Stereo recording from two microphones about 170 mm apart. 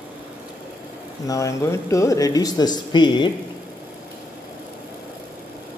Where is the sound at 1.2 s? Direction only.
20° left (ahead or behind).